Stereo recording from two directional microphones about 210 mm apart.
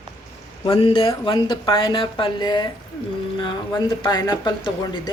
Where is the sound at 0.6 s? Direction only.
25° left (ahead or behind).